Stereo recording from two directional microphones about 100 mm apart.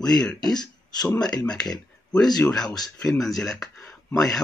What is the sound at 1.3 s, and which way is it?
Speech, 40° left (ahead or behind).